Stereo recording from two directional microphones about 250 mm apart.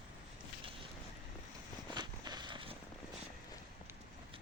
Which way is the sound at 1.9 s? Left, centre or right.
Centre.